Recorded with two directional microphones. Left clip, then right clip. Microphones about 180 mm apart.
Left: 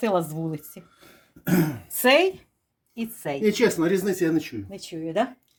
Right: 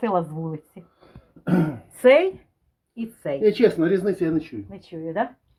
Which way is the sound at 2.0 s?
20° left (ahead or behind).